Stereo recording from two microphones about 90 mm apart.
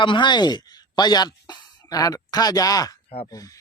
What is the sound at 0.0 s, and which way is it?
A man's voice, 60° left (ahead or behind).